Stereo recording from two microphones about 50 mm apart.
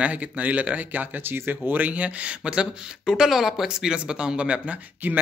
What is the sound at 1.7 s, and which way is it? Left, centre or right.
Speech, right.